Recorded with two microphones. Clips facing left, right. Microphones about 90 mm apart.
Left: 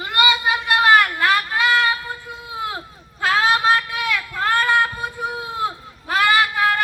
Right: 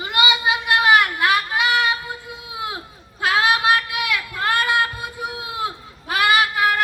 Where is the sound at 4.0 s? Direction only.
10° right (ahead or behind).